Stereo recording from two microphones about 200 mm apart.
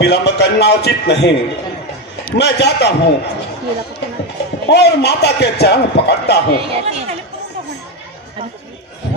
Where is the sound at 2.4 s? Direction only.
55° left (ahead or behind).